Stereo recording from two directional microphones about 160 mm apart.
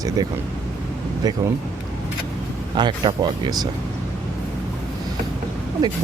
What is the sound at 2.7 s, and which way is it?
Speech, 30° right (ahead or behind).